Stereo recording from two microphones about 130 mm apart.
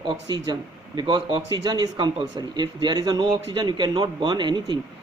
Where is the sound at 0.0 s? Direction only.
35° right (ahead or behind).